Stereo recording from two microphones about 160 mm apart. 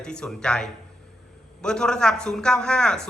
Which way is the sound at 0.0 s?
5° left (ahead or behind).